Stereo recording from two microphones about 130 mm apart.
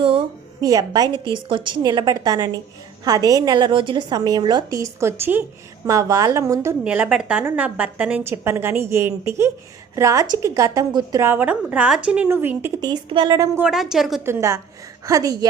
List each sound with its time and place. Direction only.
0.6 s a woman's voice: 30° right (ahead or behind)
6.8 s a woman's voice: 10° right (ahead or behind); by 11.3 s 25° right (ahead or behind)
11.3 s a woman's voice: 10° right (ahead or behind)
12.8 s a woman's voice: 35° right (ahead or behind)
13.6 s a woman's voice: 5° right (ahead or behind)
14.3 s a woman's voice: 20° right (ahead or behind)